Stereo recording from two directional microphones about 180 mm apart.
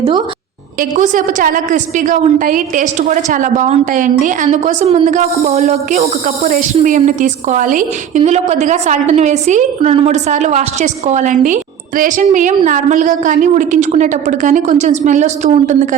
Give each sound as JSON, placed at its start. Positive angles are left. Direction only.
{"t": 0.8, "sound": "a woman's voice", "side_deg": -45}